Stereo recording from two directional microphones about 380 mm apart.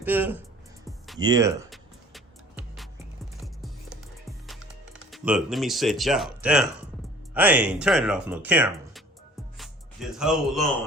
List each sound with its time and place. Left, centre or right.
0.0 s speech: centre
0.9 s music: centre
5.1 s speech: centre